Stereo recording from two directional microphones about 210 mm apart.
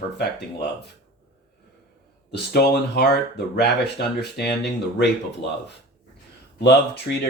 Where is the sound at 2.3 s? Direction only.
50° left (ahead or behind).